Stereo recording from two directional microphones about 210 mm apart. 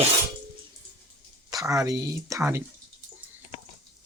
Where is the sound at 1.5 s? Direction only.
15° right (ahead or behind).